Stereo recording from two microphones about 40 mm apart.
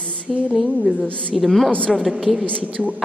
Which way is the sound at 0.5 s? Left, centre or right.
Centre.